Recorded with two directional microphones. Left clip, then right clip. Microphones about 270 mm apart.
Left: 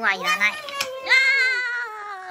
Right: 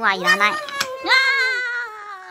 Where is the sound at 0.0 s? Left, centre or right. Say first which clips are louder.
Right 4 dB; centre.